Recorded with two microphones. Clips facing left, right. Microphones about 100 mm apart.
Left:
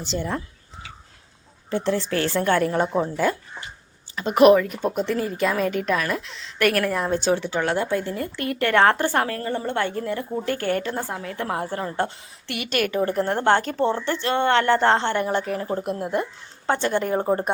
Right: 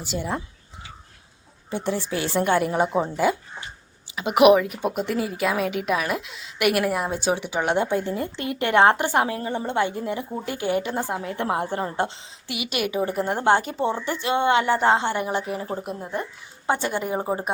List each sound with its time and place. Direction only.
0.0 s a woman's voice: 10° right (ahead or behind)
1.7 s a woman's voice: 15° right (ahead or behind)
12.5 s a woman's voice: 10° right (ahead or behind)
16.6 s a woman's voice: 10° right (ahead or behind)